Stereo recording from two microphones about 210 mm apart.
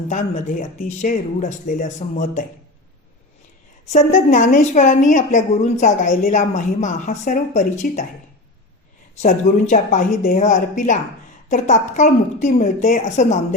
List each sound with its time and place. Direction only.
0.1 s a woman's voice: 35° left (ahead or behind)
3.9 s a woman's voice: 35° left (ahead or behind)
9.2 s a woman's voice: 35° left (ahead or behind)